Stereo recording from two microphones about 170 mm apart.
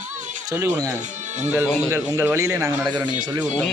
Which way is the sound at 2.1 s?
15° right (ahead or behind).